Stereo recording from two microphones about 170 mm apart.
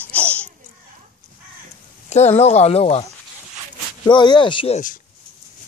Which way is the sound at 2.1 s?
40° left (ahead or behind).